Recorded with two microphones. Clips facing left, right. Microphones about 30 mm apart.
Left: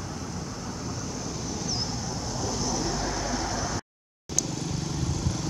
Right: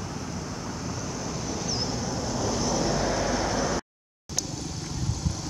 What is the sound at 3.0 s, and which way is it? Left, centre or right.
Vehicle, right.